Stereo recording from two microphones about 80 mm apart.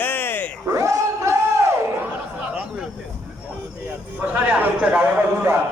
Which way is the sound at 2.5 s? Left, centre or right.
Centre.